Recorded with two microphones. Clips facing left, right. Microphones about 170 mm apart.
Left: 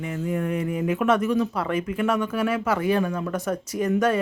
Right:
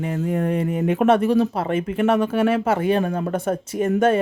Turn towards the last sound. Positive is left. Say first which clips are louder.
# right 4 dB
turn(degrees=-25)  # may be behind; listen again after turning